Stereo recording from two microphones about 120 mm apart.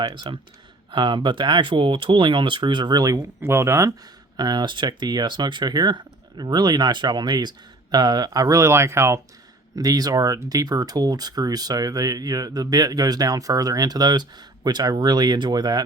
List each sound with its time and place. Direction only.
0.0 s speech: 40° right (ahead or behind); by 3.9 s 25° right (ahead or behind)
4.4 s speech: 35° right (ahead or behind)